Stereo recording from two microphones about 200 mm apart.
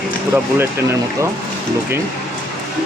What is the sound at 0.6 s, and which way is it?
Speech, 15° right (ahead or behind).